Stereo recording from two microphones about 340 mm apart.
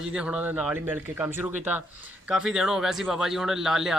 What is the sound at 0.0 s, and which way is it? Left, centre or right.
Speech, centre.